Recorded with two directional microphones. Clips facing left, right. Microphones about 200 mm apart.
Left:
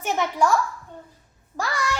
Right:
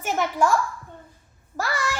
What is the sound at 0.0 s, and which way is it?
Speech, centre (ahead or behind).